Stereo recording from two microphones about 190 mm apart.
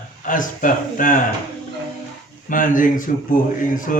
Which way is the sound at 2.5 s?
45° left (ahead or behind).